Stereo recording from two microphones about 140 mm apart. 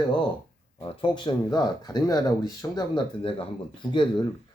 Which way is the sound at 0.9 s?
35° left (ahead or behind).